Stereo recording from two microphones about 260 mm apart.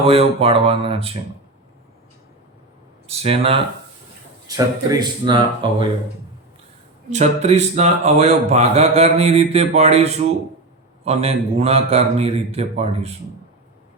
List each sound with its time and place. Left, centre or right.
0.0 s speech: right
3.1 s speech: right
7.1 s speech: right